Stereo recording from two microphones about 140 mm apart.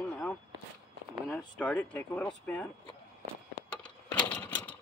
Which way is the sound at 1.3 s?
10° left (ahead or behind).